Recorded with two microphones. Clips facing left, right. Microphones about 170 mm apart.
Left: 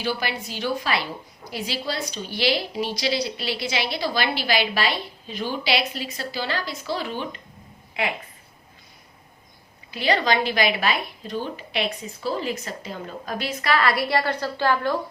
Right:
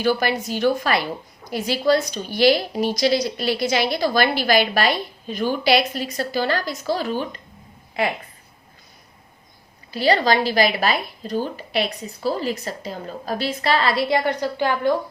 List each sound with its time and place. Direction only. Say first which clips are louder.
0.0 s a woman's voice: right 7 dB; 45° right (ahead or behind)
9.9 s a woman's voice: right 4 dB; 35° right (ahead or behind); by 14.9 s 15° right (ahead or behind)